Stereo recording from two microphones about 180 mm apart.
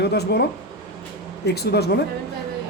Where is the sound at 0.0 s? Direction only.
65° left (ahead or behind).